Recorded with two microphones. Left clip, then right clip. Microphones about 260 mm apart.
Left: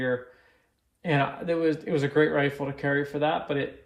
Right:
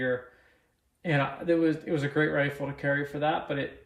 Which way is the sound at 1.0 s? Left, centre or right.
Centre.